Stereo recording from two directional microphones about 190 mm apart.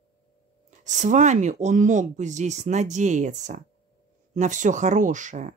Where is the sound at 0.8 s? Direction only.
40° right (ahead or behind).